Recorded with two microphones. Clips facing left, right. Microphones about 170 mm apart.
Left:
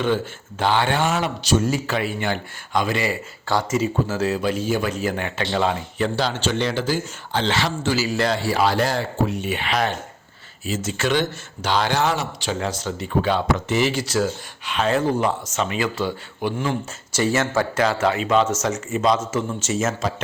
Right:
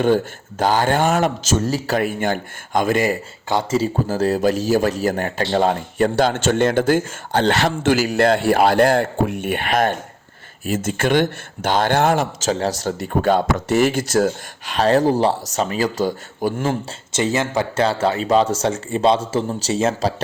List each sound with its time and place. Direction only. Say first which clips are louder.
0.6 s speech: right 3 dB; 40° right (ahead or behind)
3.5 s speech: right 2 dB; 25° right (ahead or behind); by 12.5 s 50° right (ahead or behind)
12.5 s speech: right 4 dB; 40° right (ahead or behind)
17.1 s speech: right 1 dB; 20° right (ahead or behind)
17.7 s speech: right 3 dB; 30° right (ahead or behind)